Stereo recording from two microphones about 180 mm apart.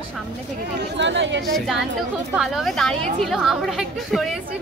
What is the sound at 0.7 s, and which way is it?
Speech, 80° right.